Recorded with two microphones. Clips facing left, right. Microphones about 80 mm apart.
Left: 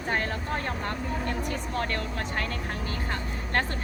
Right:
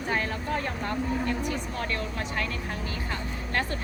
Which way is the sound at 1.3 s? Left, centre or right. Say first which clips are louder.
Right 1 dB; left.